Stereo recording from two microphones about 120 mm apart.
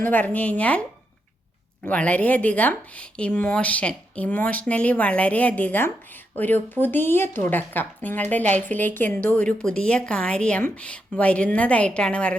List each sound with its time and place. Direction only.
0.0 s speech: 15° left (ahead or behind)